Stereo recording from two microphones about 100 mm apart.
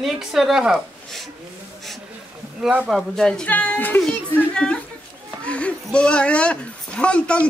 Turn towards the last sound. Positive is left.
turn(degrees=10)  # may be behind; listen again after turning